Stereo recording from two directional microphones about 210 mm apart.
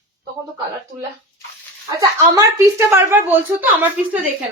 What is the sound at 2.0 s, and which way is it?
A woman's voice, 15° right (ahead or behind).